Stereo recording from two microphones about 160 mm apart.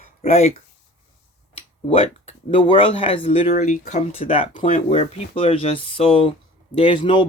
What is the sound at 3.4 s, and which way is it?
Speech, 50° left (ahead or behind).